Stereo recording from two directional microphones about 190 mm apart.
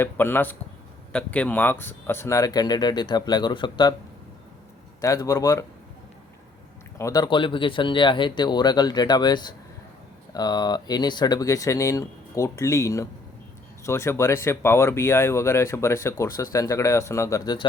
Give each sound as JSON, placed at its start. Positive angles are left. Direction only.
{"t": 0.0, "sound": "speech", "side_deg": 10}
{"t": 4.9, "sound": "speech", "side_deg": 15}
{"t": 7.0, "sound": "speech", "side_deg": 20}